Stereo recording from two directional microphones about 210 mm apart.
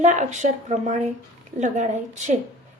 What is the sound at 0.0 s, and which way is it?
A woman's voice, 35° right (ahead or behind).